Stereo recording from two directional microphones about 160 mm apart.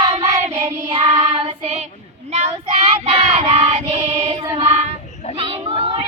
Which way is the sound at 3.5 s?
40° right (ahead or behind).